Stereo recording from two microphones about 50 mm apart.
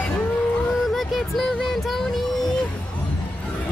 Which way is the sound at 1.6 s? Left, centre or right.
Centre.